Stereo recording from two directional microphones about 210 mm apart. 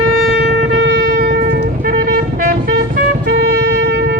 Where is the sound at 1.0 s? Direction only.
45° right (ahead or behind).